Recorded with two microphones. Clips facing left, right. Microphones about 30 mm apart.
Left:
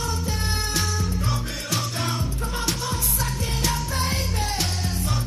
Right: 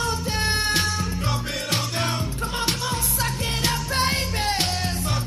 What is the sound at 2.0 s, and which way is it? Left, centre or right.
Music, right.